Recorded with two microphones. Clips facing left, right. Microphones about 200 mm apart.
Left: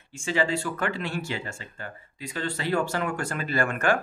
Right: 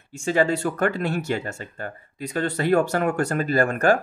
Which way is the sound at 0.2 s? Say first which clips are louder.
Right 5 dB; 45° right (ahead or behind).